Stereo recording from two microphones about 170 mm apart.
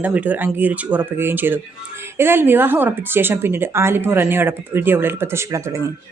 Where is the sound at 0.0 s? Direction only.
10° right (ahead or behind).